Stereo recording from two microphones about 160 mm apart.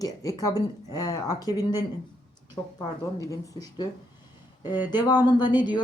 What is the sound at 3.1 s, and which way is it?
Speech, 20° left (ahead or behind).